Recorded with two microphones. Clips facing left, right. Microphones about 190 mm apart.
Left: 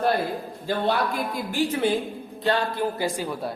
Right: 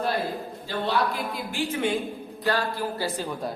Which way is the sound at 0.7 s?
50° left (ahead or behind).